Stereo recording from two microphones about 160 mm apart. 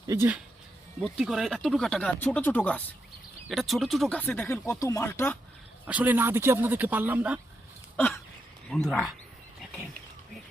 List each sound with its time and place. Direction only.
0.1 s speech: 15° right (ahead or behind)
1.0 s speech: centre (ahead or behind)
5.8 s speech: 10° right (ahead or behind)
7.9 s a sound: 5° left (ahead or behind)
8.7 s speech: centre (ahead or behind)